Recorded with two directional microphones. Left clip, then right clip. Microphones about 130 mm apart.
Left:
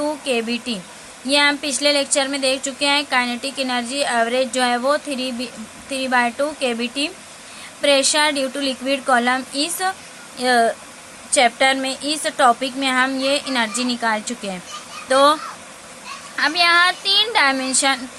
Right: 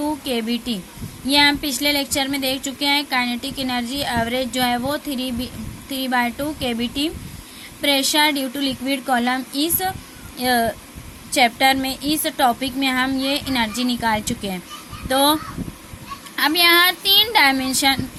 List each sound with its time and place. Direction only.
0.0 s speech: 35° right (ahead or behind)
16.3 s speech: 55° right (ahead or behind); by 18.0 s 35° right (ahead or behind)